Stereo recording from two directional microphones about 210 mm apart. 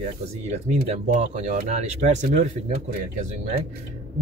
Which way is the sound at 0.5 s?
35° right (ahead or behind).